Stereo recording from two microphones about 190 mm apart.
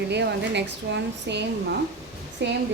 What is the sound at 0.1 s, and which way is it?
Speech, 65° right (ahead or behind).